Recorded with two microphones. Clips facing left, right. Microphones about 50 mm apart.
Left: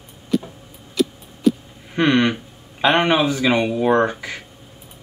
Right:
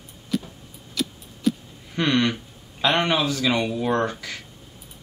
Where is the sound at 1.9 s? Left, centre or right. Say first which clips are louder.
Left 5 dB; left.